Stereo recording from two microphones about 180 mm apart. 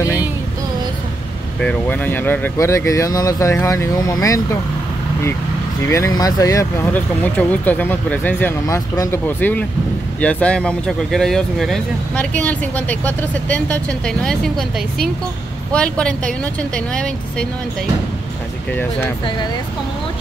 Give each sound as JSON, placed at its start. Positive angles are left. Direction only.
{"t": 1.6, "sound": "speech", "side_deg": 5}
{"t": 5.9, "sound": "speech", "side_deg": 15}
{"t": 15.7, "sound": "speech", "side_deg": 5}